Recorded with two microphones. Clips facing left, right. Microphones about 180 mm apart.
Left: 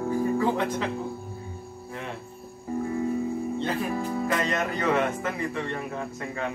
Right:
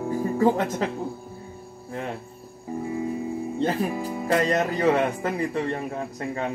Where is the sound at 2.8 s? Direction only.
15° right (ahead or behind).